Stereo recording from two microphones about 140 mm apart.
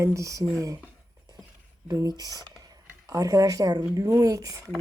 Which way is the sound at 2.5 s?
25° right (ahead or behind).